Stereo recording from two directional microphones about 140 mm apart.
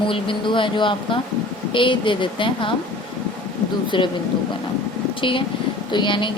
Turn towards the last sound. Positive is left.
turn(degrees=35)  # may be behind; listen again after turning